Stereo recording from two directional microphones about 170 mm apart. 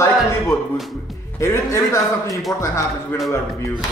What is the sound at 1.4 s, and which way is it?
A man's voice, 15° left (ahead or behind).